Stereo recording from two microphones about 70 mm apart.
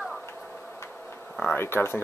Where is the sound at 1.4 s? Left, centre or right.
Left.